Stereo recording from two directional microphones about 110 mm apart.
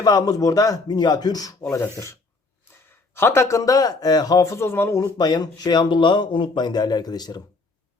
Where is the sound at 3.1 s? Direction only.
25° left (ahead or behind).